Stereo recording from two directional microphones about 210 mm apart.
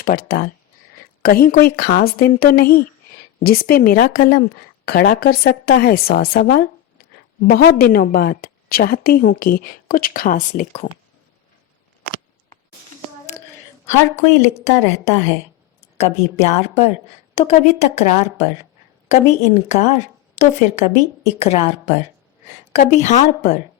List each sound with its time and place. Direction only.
0.0 s a woman's voice: 45° left (ahead or behind)
14.2 s a woman's voice: 35° left (ahead or behind)